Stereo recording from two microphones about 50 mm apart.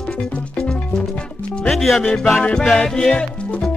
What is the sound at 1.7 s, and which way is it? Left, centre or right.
Music, centre.